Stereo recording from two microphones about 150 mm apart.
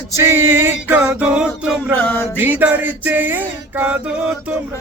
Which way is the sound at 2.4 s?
10° right (ahead or behind).